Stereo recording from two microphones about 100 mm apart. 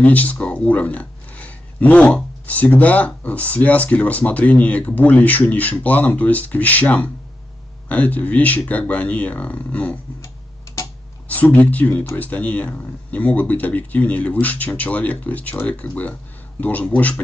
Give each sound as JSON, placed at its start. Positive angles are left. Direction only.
{"t": 0.0, "sound": "speech", "side_deg": 15}
{"t": 11.2, "sound": "speech", "side_deg": 15}